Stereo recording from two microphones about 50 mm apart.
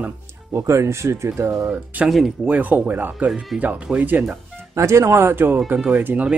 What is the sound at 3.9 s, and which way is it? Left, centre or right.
Speech, right.